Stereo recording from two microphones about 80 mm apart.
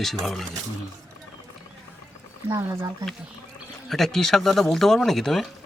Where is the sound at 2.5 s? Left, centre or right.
Right.